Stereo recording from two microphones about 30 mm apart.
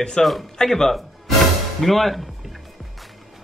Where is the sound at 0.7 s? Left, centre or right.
Centre.